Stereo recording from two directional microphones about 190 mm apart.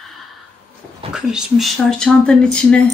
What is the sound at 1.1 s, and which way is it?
Speech, 5° right (ahead or behind).